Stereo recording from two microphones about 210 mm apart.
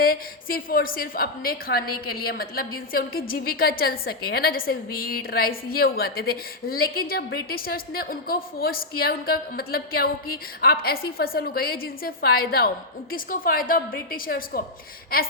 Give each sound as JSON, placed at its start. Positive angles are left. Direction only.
{"t": 0.0, "sound": "a woman's voice", "side_deg": 45}